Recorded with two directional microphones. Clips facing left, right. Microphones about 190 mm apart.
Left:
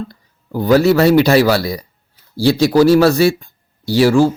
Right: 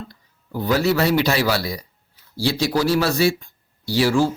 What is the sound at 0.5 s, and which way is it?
Speech, 50° left (ahead or behind).